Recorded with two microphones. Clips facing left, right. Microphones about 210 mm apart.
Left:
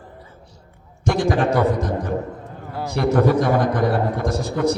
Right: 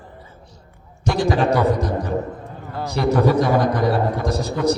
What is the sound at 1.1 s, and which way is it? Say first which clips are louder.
A man's voice: even; 50° left (ahead or behind).